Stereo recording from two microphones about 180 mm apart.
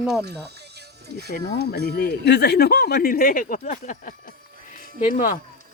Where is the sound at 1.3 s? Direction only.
50° left (ahead or behind).